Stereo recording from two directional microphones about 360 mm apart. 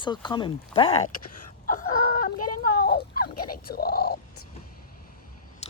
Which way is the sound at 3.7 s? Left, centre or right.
Left.